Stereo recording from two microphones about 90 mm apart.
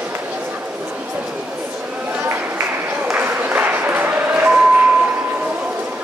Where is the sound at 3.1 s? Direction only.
20° right (ahead or behind).